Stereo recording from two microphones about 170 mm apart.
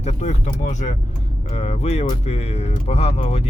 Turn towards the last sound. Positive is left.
turn(degrees=40)  # may be behind; listen again after turning